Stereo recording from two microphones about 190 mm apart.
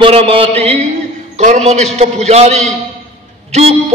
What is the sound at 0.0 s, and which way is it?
A man's voice, 30° right (ahead or behind).